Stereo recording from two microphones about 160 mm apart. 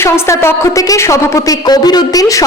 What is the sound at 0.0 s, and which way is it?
A woman's voice, 15° left (ahead or behind).